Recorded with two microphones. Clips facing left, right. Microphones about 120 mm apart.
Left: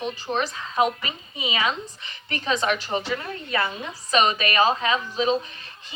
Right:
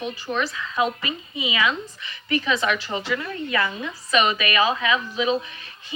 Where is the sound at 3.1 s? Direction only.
30° left (ahead or behind).